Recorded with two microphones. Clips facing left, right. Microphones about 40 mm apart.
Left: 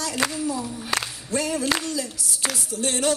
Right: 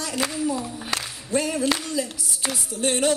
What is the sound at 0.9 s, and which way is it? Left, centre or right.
Speech, centre.